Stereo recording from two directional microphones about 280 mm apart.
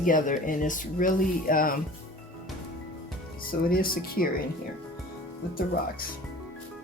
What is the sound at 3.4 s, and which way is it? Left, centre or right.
Speech, left.